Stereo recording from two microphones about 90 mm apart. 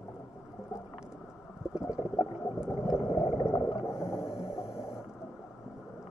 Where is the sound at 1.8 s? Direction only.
10° right (ahead or behind).